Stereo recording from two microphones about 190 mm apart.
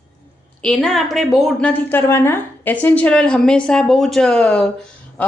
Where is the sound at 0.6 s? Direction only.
5° left (ahead or behind).